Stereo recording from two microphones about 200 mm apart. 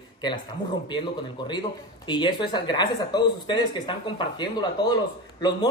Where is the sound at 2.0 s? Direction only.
25° left (ahead or behind).